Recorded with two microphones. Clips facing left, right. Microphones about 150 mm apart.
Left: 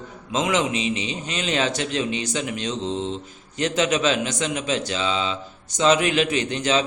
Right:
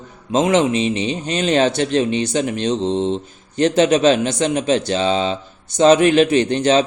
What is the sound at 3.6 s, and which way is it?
Speech, 35° right (ahead or behind).